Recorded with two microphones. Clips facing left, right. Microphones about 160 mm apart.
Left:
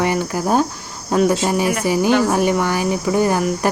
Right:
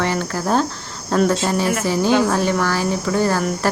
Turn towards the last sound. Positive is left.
turn(degrees=15)  # may be behind; listen again after turning